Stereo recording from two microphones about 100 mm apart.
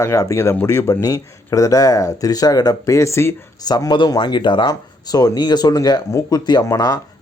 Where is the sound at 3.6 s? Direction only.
45° left (ahead or behind).